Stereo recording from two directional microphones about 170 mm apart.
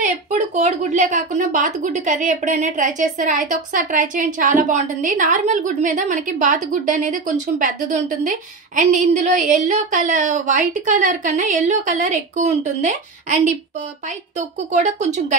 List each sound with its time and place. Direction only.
0.0 s a woman's voice: 45° right (ahead or behind)